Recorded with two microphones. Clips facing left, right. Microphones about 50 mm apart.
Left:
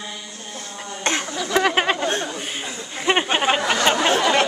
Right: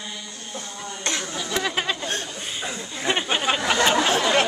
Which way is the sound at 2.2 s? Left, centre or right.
Left.